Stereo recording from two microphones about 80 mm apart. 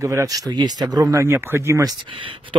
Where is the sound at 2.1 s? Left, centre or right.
Right.